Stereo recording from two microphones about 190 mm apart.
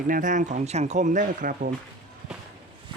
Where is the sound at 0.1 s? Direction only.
45° right (ahead or behind).